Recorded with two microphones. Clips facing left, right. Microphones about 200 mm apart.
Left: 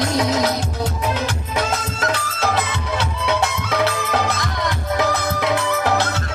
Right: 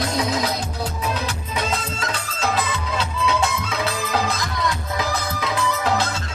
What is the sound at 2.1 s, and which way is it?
Music, 70° left (ahead or behind).